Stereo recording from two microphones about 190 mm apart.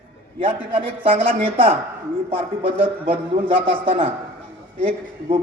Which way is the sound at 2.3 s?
30° right (ahead or behind).